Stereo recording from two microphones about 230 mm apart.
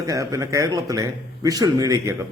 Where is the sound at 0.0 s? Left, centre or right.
Centre.